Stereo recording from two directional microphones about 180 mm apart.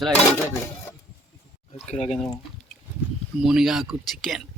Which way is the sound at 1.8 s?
35° left (ahead or behind).